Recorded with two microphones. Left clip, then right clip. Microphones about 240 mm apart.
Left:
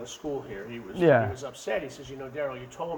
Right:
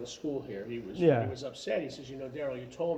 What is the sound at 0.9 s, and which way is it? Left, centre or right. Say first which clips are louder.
Speech: left 5 dB; left.